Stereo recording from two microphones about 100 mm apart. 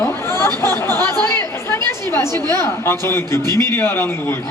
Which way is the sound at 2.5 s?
25° left (ahead or behind).